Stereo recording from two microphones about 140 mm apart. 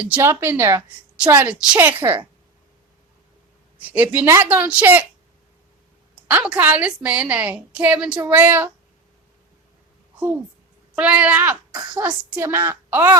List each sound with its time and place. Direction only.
0.0 s a woman's voice: 15° right (ahead or behind)
3.8 s a woman's voice: 10° right (ahead or behind)
6.2 s a woman's voice: 10° right (ahead or behind)
10.9 s a woman's voice: 10° right (ahead or behind)
11.7 s speech: 30° right (ahead or behind)
12.0 s a woman's voice: 15° right (ahead or behind)